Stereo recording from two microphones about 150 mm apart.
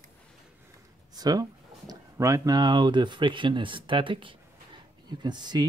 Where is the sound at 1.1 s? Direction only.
25° right (ahead or behind).